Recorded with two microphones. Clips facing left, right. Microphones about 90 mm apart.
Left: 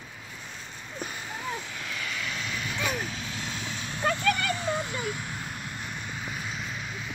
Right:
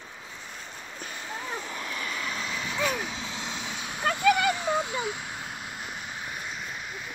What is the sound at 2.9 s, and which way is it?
Vehicle, 20° right (ahead or behind).